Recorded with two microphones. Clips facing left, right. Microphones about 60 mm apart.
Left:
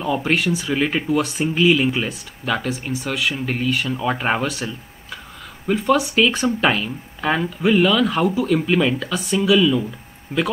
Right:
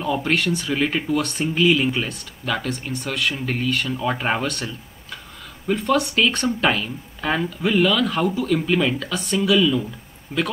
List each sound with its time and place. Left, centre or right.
0.0 s speech: centre
10.3 s speech: centre